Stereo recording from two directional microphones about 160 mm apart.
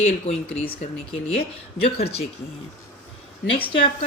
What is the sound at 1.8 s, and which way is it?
Speech, 40° left (ahead or behind).